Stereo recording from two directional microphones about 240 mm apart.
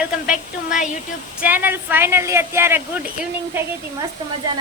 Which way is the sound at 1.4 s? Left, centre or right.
Centre.